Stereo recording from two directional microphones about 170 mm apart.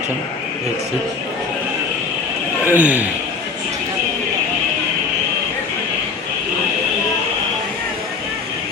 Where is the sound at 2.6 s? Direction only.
10° right (ahead or behind).